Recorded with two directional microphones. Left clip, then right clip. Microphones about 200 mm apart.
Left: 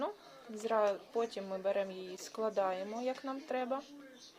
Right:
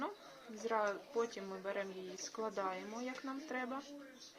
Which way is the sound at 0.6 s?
55° left (ahead or behind).